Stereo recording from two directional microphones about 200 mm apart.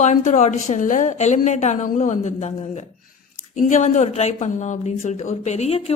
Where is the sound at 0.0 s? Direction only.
35° left (ahead or behind).